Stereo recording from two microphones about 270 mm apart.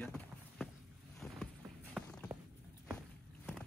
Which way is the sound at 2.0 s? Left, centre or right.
Centre.